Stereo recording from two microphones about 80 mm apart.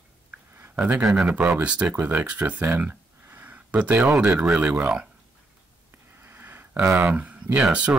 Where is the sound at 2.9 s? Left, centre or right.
Right.